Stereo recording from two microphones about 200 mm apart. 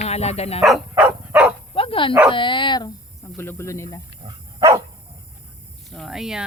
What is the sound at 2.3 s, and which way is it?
Speech, 25° left (ahead or behind).